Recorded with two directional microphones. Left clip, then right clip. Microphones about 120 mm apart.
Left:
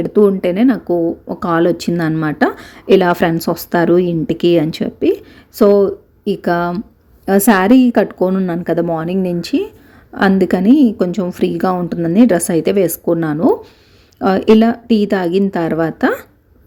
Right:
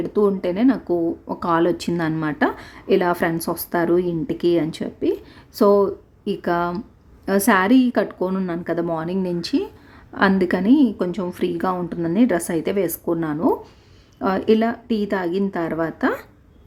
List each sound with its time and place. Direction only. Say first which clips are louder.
0.0 s a woman's voice: left 7 dB; 25° left (ahead or behind)